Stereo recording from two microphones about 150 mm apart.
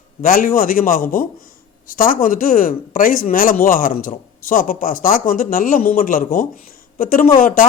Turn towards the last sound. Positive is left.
turn(degrees=65)  # may be behind; listen again after turning